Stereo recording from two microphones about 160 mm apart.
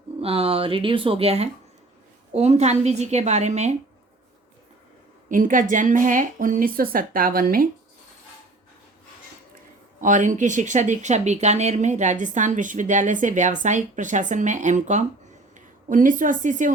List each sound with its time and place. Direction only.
0.2 s speech: 35° right (ahead or behind)
5.3 s a woman's voice: 55° right (ahead or behind)
10.0 s speech: 50° right (ahead or behind)